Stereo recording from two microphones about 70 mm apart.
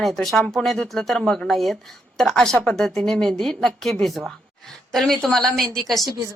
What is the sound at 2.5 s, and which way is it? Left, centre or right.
Speech, centre.